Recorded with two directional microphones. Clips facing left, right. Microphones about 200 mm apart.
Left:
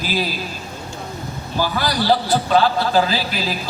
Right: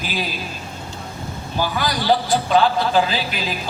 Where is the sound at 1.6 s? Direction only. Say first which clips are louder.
Left 2 dB; 40° left (ahead or behind).